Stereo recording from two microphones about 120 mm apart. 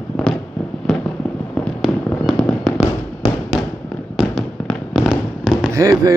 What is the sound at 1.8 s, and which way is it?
Fireworks, 5° left (ahead or behind).